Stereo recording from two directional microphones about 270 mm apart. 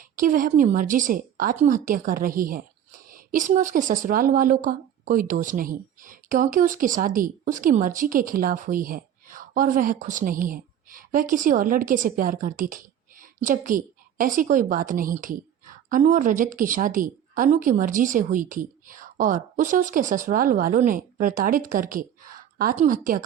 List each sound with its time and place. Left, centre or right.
0.0 s speech: right